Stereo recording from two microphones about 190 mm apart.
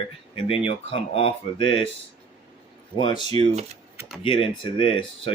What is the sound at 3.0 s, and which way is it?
Speech, 25° left (ahead or behind).